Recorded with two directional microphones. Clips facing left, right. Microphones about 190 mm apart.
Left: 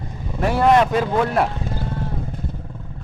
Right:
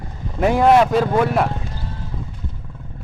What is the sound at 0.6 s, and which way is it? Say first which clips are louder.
Speech: right 1 dB; 5° right (ahead or behind).